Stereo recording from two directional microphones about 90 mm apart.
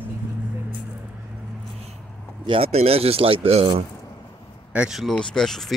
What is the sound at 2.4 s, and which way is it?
Speech, 85° right.